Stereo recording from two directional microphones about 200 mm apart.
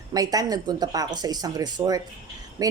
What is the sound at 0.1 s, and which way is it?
A woman's voice, 20° right (ahead or behind).